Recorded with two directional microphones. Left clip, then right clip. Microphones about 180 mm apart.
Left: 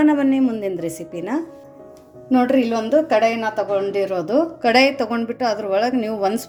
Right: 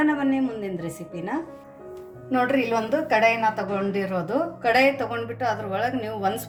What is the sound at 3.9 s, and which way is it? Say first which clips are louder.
A woman's voice: left 7 dB; 50° left (ahead or behind).